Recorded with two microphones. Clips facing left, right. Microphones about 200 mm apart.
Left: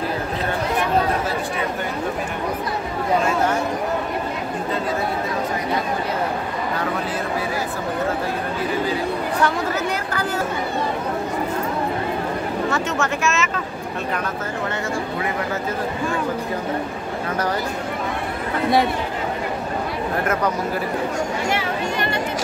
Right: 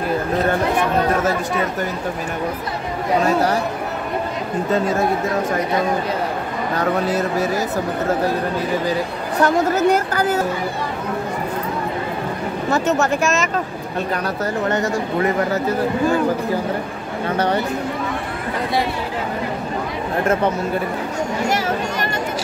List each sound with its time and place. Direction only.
6.8 s speech: 40° right (ahead or behind)
9.4 s a woman's voice: 40° right (ahead or behind)
12.7 s a woman's voice: 40° right (ahead or behind)